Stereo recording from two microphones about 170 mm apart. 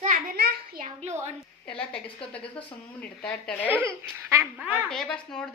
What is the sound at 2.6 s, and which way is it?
Speech, 5° left (ahead or behind).